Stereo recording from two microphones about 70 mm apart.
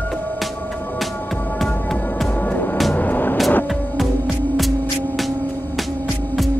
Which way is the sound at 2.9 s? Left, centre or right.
Left.